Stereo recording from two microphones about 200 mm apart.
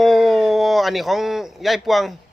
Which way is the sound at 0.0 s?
Centre (ahead or behind).